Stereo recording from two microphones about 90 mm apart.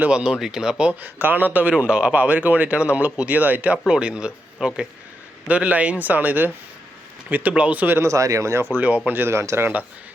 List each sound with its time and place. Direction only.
0.0 s a man's voice: 10° right (ahead or behind)
1.0 s a man's voice: 20° right (ahead or behind)
8.0 s speech: 35° right (ahead or behind)